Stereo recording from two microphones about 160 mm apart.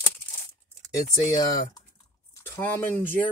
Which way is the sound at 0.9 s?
20° left (ahead or behind).